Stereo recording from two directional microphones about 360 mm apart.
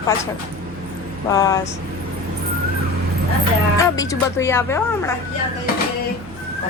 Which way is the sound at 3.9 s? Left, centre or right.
Centre.